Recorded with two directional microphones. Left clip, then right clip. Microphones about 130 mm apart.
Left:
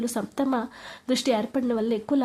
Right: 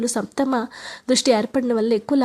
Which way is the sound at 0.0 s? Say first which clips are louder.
Right 5 dB; 35° right (ahead or behind).